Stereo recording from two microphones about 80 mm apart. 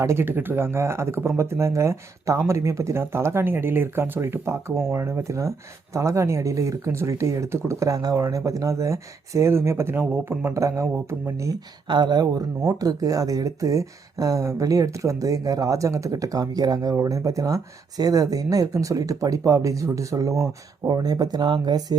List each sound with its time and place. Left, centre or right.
0.0 s speech: right
10.5 s speech: right
11.9 s speech: right